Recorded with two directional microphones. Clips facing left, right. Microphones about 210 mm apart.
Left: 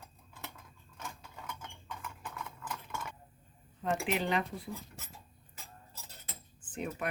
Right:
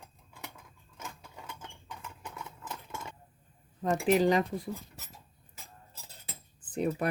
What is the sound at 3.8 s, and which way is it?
Speech, 40° right (ahead or behind).